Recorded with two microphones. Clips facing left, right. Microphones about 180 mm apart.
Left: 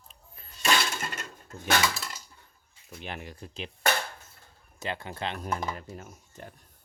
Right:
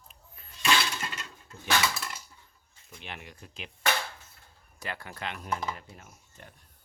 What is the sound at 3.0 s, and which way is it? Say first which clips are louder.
Speech: left 5 dB; 40° left (ahead or behind).